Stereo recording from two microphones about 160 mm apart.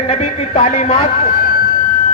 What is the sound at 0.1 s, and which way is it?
A man's voice, 40° left (ahead or behind).